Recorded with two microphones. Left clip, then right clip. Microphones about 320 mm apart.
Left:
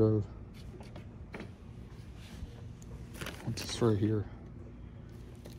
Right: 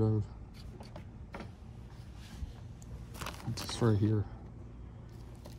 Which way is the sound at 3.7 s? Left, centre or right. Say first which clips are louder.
Left 2 dB; centre.